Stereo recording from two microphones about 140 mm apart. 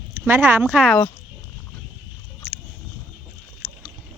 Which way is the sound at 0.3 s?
15° right (ahead or behind).